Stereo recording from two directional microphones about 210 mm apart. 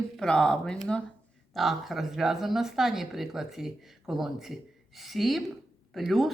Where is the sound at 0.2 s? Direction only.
5° left (ahead or behind).